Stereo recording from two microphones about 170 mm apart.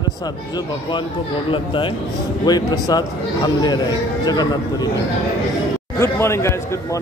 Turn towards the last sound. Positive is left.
turn(degrees=15)  # may be behind; listen again after turning